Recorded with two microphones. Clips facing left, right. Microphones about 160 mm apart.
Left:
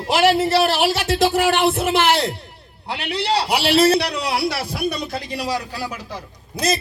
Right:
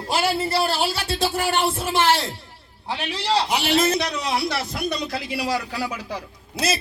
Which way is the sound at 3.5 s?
70° left (ahead or behind).